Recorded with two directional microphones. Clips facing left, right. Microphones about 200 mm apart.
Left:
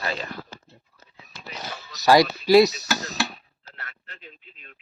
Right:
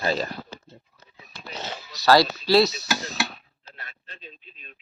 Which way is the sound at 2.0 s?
15° left (ahead or behind).